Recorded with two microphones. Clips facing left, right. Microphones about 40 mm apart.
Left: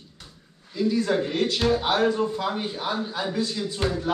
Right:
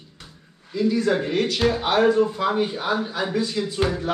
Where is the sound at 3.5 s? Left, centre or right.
Right.